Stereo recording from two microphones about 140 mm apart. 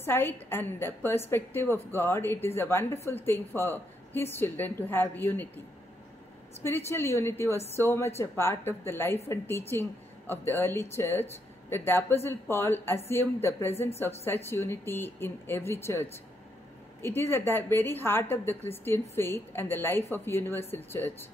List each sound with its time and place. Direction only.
0.0 s a woman's voice: 15° left (ahead or behind)
6.6 s a woman's voice: 15° left (ahead or behind)